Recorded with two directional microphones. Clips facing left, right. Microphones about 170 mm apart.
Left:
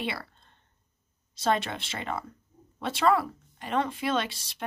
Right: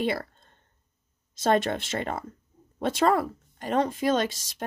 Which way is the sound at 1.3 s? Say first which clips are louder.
Right 4 dB; 45° right (ahead or behind).